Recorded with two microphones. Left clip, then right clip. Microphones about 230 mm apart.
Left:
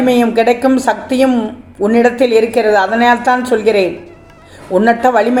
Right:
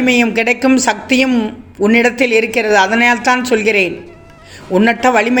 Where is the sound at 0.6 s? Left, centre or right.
Right.